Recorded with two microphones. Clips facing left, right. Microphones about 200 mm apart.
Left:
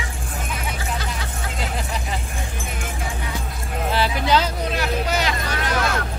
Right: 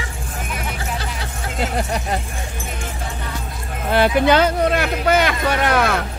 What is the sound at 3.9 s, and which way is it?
Speech, 55° right (ahead or behind).